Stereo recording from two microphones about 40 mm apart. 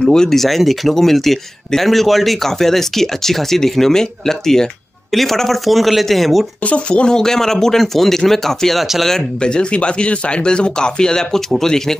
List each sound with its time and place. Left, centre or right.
0.1 s speech: centre
6.6 s speech: left
7.2 s speech: centre
9.4 s speech: left